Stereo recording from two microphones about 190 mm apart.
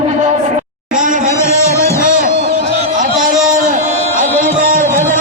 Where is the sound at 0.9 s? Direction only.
45° right (ahead or behind).